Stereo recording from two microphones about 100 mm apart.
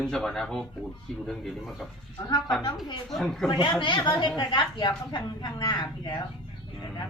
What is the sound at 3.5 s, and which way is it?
A woman's voice, 55° left (ahead or behind).